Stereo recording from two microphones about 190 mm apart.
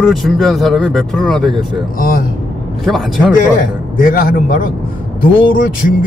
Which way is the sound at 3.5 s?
45° left (ahead or behind).